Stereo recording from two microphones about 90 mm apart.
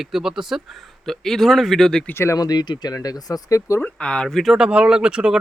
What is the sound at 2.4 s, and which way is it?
Speech, 45° left (ahead or behind).